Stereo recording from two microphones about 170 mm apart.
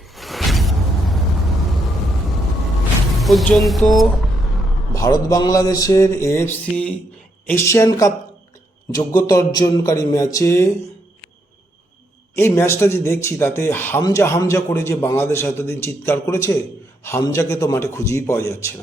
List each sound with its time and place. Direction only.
0.2 s music: centre (ahead or behind)
3.2 s speech: centre (ahead or behind)
4.9 s a sound: 20° left (ahead or behind)
7.4 s a man's voice: 15° left (ahead or behind)
8.9 s a sound: 20° left (ahead or behind)
12.4 s a man's voice: 15° left (ahead or behind)